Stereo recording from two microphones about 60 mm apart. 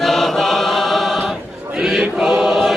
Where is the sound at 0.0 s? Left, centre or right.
Centre.